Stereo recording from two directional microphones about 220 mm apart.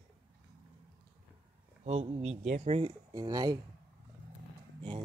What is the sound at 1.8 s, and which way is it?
Speech, 30° right (ahead or behind).